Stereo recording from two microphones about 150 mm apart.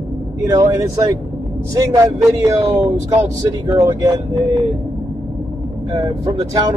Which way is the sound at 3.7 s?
25° right (ahead or behind).